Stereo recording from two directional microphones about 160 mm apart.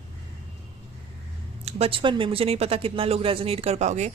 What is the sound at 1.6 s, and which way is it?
Speech, 35° right (ahead or behind).